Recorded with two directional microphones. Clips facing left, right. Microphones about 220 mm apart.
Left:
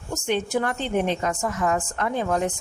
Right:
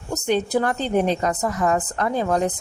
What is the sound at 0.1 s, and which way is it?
Speech, 40° right (ahead or behind).